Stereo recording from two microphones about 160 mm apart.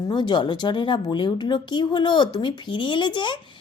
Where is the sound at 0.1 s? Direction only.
30° left (ahead or behind).